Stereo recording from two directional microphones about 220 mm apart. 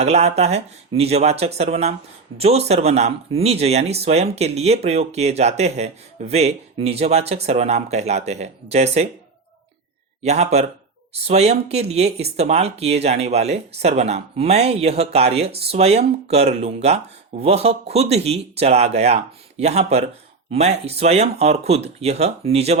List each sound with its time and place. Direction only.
0.0 s speech: 30° right (ahead or behind)
10.2 s speech: 30° right (ahead or behind)